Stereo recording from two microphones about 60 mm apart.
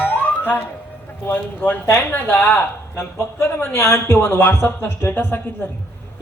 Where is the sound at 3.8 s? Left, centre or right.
Left.